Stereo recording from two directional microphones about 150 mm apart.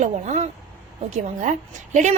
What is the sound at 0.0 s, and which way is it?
A woman's voice, 50° right (ahead or behind).